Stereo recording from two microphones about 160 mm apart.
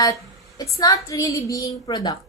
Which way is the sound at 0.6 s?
20° left (ahead or behind).